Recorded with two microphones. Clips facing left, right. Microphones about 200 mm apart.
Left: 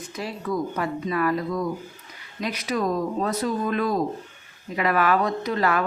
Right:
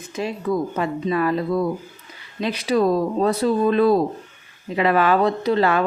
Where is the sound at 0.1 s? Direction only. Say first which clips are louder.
Right 6 dB; 20° right (ahead or behind).